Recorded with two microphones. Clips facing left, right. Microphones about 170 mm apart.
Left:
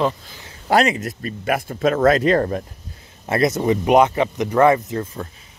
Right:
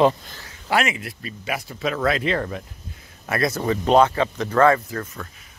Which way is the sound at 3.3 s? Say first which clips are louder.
Left 5 dB; 20° left (ahead or behind).